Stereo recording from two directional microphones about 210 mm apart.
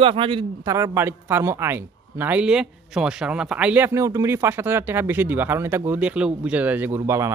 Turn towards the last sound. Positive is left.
turn(degrees=-15)  # may be behind; listen again after turning